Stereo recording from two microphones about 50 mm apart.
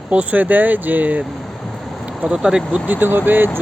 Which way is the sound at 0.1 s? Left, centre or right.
Right.